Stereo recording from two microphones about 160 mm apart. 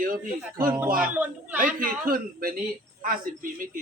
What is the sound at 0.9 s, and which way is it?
Speech, 60° right (ahead or behind).